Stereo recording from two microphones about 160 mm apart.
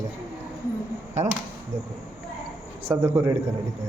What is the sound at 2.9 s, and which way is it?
Speech, 15° right (ahead or behind).